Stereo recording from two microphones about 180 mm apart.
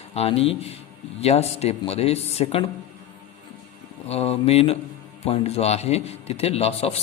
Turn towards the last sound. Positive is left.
turn(degrees=35)  # may be behind; listen again after turning